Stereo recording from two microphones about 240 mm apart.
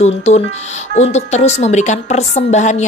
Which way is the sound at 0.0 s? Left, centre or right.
Left.